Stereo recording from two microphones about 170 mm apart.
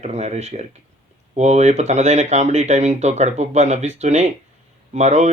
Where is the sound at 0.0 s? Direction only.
40° right (ahead or behind).